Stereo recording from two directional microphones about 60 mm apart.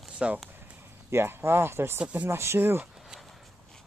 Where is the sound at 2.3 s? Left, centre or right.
Right.